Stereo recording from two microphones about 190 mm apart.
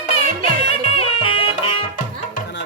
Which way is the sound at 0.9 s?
30° left (ahead or behind).